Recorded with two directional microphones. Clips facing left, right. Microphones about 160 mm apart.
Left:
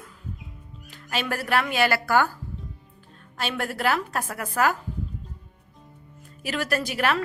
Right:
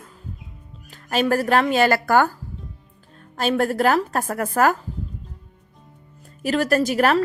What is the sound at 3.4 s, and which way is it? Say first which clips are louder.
Speech: right 8 dB; 40° right (ahead or behind).